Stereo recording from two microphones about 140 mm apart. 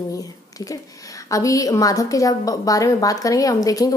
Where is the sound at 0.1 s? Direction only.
25° left (ahead or behind).